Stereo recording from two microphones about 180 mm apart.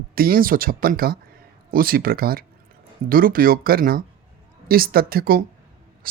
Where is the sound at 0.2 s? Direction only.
55° right (ahead or behind).